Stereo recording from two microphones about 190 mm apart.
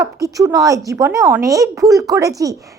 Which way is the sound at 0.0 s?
15° right (ahead or behind).